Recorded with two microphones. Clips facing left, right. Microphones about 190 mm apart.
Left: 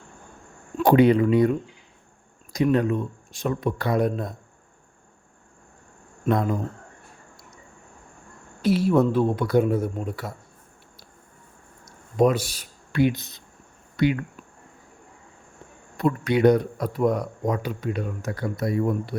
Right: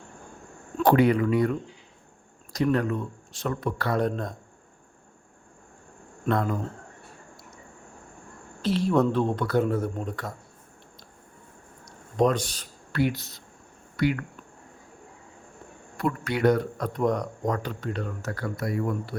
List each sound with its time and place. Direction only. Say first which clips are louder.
0.8 s speech: left 3 dB; 15° left (ahead or behind)
6.2 s speech: left 3 dB; 15° left (ahead or behind)
8.6 s speech: left 3 dB; 10° left (ahead or behind)
11.9 s speech: left 3 dB; 10° left (ahead or behind)
16.0 s speech: left 5 dB; 20° left (ahead or behind)